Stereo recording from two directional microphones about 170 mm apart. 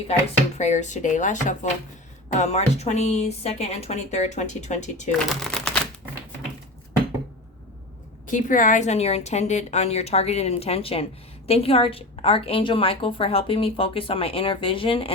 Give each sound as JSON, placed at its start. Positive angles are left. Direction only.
{"t": 0.6, "sound": "a woman's voice", "side_deg": 45}
{"t": 5.3, "sound": "speech", "side_deg": 5}
{"t": 8.3, "sound": "a woman's voice", "side_deg": 50}